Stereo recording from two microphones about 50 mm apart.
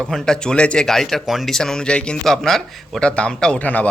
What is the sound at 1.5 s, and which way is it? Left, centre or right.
Speech, centre.